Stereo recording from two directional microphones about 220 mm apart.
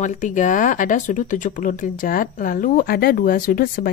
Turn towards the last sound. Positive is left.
turn(degrees=40)  # may be behind; listen again after turning